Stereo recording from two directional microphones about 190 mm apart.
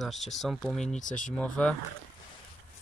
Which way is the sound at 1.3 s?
5° left (ahead or behind).